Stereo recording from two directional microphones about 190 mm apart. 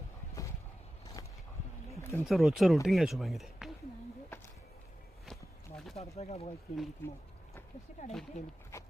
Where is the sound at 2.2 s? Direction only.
Centre (ahead or behind).